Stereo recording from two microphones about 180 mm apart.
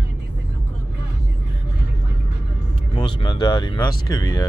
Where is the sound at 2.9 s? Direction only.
25° left (ahead or behind).